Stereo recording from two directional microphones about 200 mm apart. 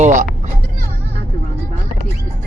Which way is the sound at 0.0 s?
40° right (ahead or behind).